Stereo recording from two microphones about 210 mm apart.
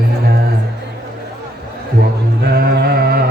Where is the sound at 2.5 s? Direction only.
45° right (ahead or behind).